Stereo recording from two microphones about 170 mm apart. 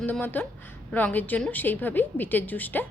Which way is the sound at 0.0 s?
10° left (ahead or behind).